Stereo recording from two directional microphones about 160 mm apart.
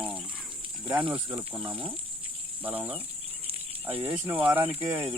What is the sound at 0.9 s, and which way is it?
Speech, 30° right (ahead or behind).